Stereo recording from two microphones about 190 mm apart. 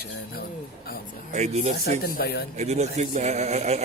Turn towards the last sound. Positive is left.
turn(degrees=-35)  # may be behind; listen again after turning